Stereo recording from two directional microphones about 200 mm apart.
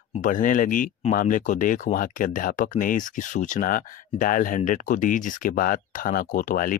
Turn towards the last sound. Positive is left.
turn(degrees=45)  # may be behind; listen again after turning